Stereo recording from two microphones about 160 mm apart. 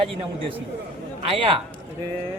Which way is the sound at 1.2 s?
35° right (ahead or behind).